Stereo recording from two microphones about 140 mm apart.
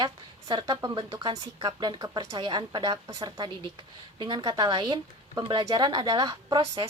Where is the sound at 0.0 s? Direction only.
30° right (ahead or behind).